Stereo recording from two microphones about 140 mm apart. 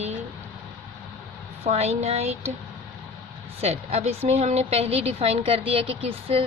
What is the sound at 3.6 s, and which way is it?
A woman's voice, 50° right (ahead or behind).